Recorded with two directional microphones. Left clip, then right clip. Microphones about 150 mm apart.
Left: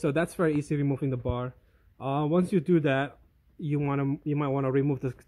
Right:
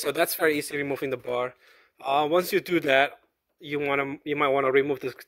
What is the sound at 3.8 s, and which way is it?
Speech, 15° right (ahead or behind).